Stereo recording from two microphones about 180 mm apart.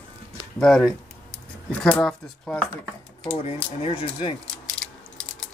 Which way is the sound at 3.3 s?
35° left (ahead or behind).